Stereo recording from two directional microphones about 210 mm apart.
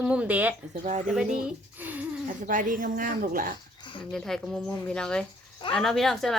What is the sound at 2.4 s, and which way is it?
Speech, 40° right (ahead or behind).